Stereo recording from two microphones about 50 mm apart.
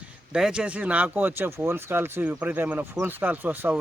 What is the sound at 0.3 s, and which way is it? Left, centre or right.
Speech, centre.